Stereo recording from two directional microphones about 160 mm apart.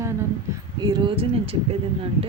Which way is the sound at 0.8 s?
25° right (ahead or behind).